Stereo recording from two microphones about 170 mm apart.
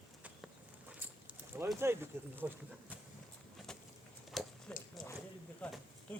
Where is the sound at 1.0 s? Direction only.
10° right (ahead or behind).